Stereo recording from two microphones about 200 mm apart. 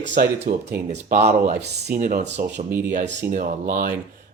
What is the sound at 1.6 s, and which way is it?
Speech, 50° right (ahead or behind).